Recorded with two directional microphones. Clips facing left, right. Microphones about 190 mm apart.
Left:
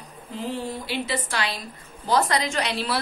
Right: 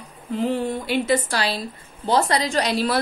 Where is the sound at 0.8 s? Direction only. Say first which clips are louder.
Right 7 dB; 45° right (ahead or behind).